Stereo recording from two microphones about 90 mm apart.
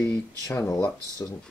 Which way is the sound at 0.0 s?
30° left (ahead or behind).